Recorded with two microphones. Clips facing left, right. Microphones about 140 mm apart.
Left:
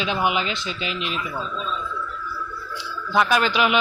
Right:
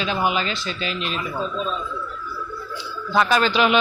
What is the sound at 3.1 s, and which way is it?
Speech, 10° left (ahead or behind).